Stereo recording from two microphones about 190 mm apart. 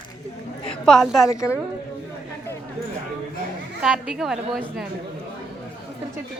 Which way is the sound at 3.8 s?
5° right (ahead or behind).